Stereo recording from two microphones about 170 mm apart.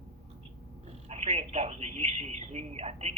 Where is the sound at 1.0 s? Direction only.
40° right (ahead or behind).